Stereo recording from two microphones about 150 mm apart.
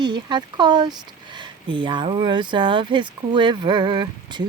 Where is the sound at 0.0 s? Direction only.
30° right (ahead or behind).